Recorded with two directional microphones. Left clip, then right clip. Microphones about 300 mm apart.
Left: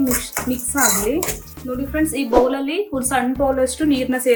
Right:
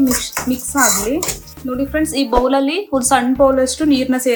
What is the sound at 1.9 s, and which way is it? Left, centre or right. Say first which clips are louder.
A woman's voice: right 1 dB; centre.